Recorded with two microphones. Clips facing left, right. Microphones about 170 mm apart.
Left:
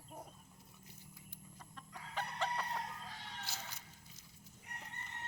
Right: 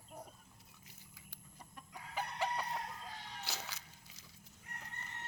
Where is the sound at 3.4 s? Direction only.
85° right.